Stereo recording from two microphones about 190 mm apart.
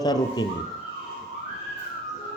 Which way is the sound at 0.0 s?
20° left (ahead or behind).